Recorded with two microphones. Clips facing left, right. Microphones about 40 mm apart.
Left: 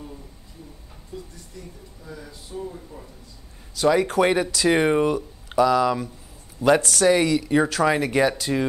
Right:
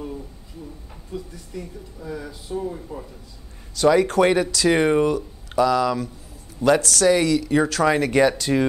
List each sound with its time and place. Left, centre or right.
2.5 s speech: right
3.7 s speech: centre